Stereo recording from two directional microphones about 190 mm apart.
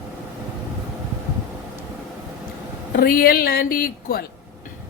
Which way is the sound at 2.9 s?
50° left (ahead or behind).